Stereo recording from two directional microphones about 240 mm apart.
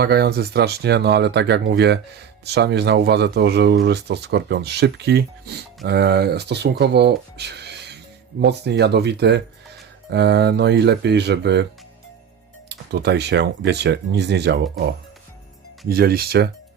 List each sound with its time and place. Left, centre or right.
0.0 s speech: right
12.6 s speech: right